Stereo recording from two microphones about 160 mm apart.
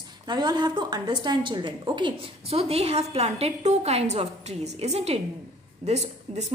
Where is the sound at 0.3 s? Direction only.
25° right (ahead or behind).